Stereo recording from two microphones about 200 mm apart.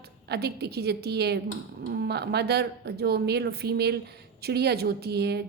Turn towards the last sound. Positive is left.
turn(degrees=-55)  # may be behind; listen again after turning